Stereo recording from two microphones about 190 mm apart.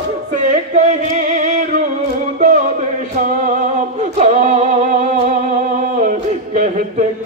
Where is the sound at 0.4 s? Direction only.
40° right (ahead or behind).